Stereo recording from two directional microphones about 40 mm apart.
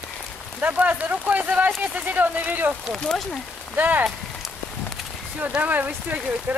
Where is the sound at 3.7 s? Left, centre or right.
Right.